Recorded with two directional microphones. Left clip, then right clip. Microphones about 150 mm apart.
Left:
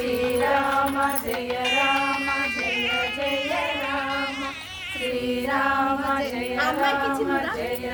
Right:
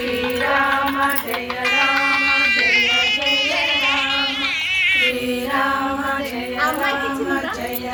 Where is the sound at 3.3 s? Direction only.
55° left (ahead or behind); by 5.1 s 40° left (ahead or behind).